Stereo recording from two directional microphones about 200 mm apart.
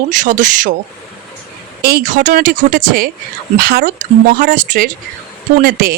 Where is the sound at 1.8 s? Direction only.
45° right (ahead or behind).